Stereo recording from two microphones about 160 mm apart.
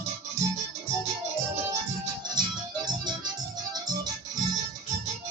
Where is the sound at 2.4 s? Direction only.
25° right (ahead or behind).